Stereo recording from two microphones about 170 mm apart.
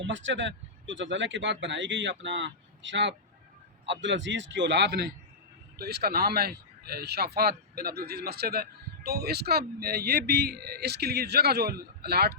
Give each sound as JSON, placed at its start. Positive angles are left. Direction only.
{"t": 0.0, "sound": "speech", "side_deg": -90}
{"t": 5.7, "sound": "a man's voice", "side_deg": -70}